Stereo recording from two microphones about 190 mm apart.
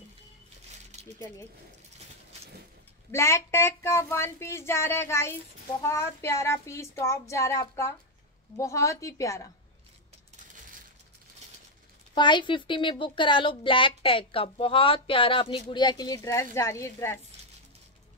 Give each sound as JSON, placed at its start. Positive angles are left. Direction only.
{"t": 3.1, "sound": "speech", "side_deg": 15}
{"t": 12.2, "sound": "a woman's voice", "side_deg": 25}